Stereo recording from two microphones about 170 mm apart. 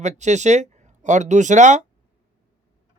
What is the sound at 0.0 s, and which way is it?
Speech, 45° right (ahead or behind).